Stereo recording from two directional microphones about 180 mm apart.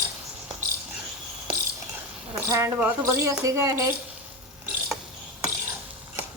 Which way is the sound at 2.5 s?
15° right (ahead or behind).